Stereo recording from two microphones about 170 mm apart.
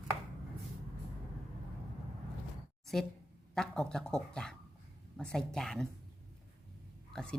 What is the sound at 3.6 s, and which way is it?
Speech, 5° left (ahead or behind).